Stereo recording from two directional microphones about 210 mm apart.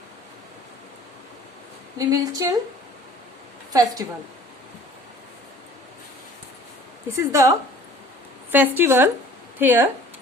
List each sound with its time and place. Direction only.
2.0 s speech: 15° right (ahead or behind)
3.7 s a woman's voice: 15° right (ahead or behind)
7.2 s speech: 15° right (ahead or behind)
8.5 s speech: 10° right (ahead or behind)